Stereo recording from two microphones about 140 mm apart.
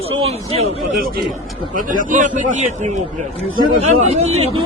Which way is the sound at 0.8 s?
90° right.